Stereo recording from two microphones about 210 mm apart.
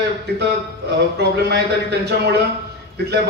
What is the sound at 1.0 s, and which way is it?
A man's voice, 50° right (ahead or behind).